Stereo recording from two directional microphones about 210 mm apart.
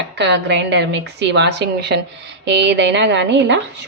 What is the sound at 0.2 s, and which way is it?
A woman's voice, 55° right (ahead or behind).